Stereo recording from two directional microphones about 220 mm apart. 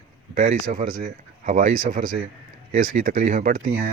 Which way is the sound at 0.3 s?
40° right (ahead or behind).